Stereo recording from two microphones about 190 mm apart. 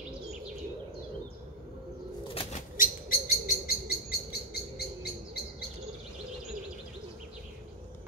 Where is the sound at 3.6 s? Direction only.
55° left (ahead or behind).